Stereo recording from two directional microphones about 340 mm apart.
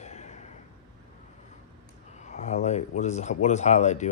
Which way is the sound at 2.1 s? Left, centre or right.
Left.